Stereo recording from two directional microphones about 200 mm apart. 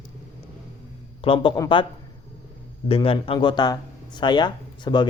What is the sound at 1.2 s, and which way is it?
Speech, 25° left (ahead or behind).